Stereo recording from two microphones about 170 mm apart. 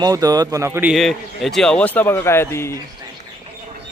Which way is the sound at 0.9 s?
Centre (ahead or behind).